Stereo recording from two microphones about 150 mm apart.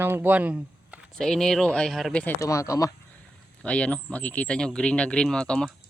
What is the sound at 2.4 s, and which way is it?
Speech, 20° left (ahead or behind).